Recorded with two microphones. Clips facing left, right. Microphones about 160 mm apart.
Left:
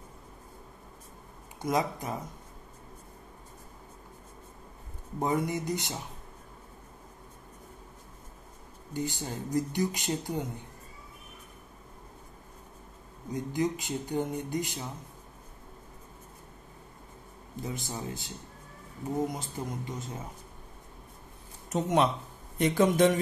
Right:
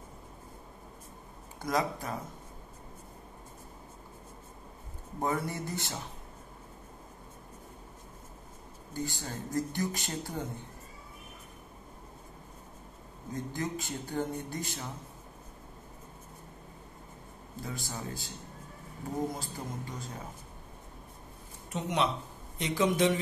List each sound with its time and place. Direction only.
1.6 s speech: 20° left (ahead or behind)
5.2 s speech: 20° left (ahead or behind)
8.9 s speech: 20° left (ahead or behind)
13.3 s speech: 15° left (ahead or behind)
17.6 s speech: 20° left (ahead or behind)
21.6 s speech: 45° left (ahead or behind)